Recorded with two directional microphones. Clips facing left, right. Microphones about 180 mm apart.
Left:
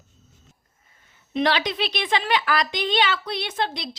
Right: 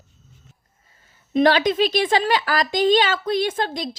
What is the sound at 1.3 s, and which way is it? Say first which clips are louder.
A woman's voice: right 6 dB; 45° right (ahead or behind).